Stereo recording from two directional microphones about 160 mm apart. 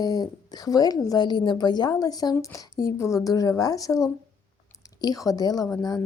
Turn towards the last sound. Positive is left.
turn(degrees=20)  # may be behind; listen again after turning